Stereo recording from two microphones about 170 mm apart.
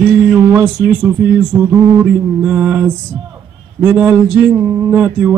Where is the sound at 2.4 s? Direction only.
10° right (ahead or behind).